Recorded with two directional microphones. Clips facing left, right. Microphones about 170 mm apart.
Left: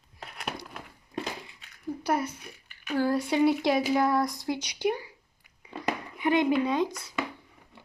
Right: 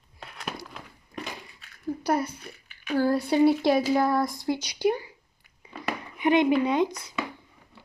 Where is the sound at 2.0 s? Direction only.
35° right (ahead or behind).